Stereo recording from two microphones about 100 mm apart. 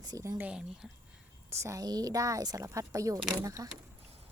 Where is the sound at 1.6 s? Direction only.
35° right (ahead or behind).